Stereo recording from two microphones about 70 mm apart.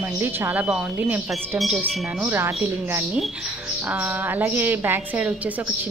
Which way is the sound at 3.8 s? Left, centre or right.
Right.